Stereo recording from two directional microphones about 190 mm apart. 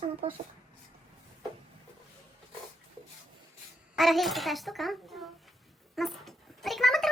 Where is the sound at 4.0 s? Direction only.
Centre (ahead or behind).